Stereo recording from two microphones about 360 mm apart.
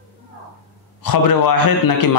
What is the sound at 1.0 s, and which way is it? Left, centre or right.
Speech, left.